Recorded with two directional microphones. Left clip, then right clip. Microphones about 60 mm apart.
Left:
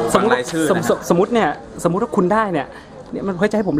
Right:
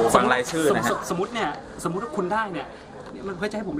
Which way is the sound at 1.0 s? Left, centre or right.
Left.